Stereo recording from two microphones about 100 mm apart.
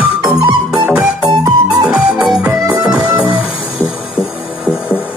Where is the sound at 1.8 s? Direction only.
10° right (ahead or behind).